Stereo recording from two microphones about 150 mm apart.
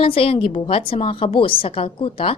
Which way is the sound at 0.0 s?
40° left (ahead or behind).